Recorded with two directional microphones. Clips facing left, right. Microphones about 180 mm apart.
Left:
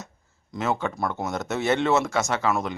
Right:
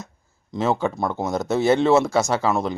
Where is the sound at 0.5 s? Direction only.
30° right (ahead or behind).